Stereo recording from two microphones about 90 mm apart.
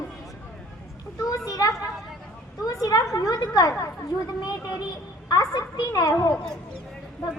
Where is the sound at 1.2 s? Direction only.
45° left (ahead or behind).